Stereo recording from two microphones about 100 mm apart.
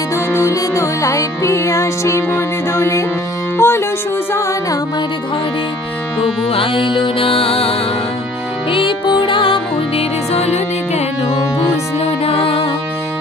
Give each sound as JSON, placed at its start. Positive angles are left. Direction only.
{"t": 0.1, "sound": "music", "side_deg": 30}
{"t": 3.5, "sound": "speech", "side_deg": 25}
{"t": 4.3, "sound": "music", "side_deg": 30}
{"t": 6.5, "sound": "music", "side_deg": 60}
{"t": 8.7, "sound": "music", "side_deg": 55}